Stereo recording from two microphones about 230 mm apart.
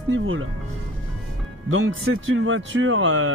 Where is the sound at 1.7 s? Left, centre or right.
Right.